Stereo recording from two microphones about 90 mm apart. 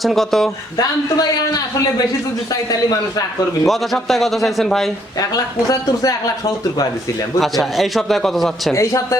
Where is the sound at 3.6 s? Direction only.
Centre (ahead or behind).